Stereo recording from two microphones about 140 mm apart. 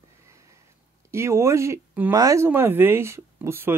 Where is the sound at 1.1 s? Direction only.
20° right (ahead or behind).